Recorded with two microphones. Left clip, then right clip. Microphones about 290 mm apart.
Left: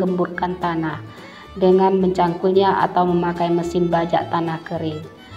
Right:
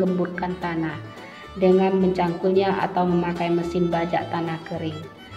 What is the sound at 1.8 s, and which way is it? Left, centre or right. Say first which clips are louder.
Speech: left 4 dB; centre.